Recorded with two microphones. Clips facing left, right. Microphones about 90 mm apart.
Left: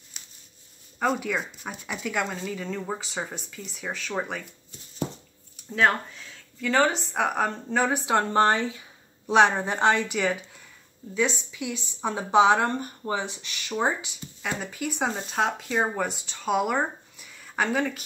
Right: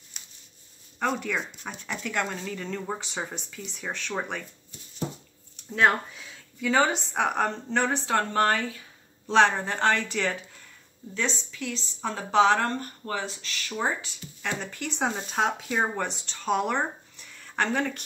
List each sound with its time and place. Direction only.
0.2 s a sound: centre (ahead or behind)
0.9 s speech: 5° left (ahead or behind)
5.6 s speech: 5° right (ahead or behind); by 8.3 s 15° left (ahead or behind)
8.3 s a woman's voice: 25° left (ahead or behind)
14.4 s speech: 5° left (ahead or behind)